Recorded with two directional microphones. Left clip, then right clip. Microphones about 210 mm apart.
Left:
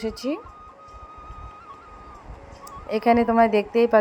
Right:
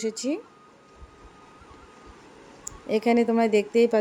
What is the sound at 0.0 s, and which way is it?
Speech, centre (ahead or behind).